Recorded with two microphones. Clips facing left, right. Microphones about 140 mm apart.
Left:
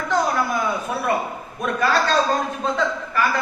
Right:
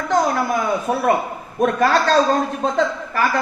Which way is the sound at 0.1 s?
45° right (ahead or behind).